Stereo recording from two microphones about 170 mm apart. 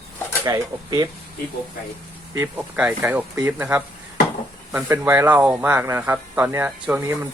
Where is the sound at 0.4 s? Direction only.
20° right (ahead or behind).